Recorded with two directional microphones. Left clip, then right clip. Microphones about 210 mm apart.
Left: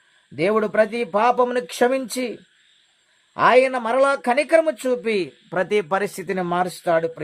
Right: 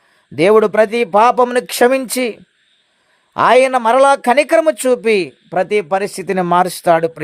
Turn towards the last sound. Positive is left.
turn(degrees=-35)  # may be behind; listen again after turning